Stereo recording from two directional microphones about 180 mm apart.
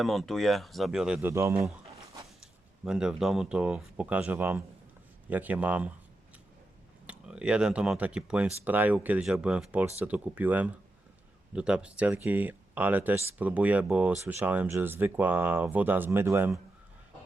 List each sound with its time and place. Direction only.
0.0 s speech: centre (ahead or behind); by 1.6 s 15° right (ahead or behind)
2.4 s speech: 5° right (ahead or behind)
7.1 s speech: 5° right (ahead or behind)